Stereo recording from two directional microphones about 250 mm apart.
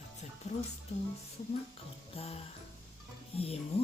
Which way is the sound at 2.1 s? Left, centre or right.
Left.